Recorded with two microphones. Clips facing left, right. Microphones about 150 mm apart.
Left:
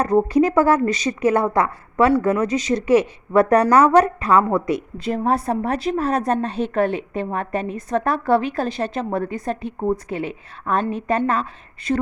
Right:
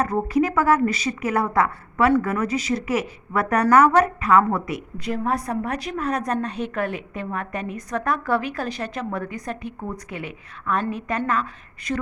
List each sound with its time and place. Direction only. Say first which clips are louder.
0.5 s a woman's voice: left 3 dB; 30° left (ahead or behind)